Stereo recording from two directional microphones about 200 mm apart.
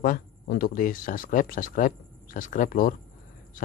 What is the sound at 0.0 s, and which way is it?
Speech, 45° left (ahead or behind).